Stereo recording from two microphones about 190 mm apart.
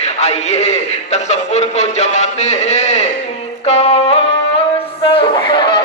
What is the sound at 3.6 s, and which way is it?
Music, 35° left (ahead or behind).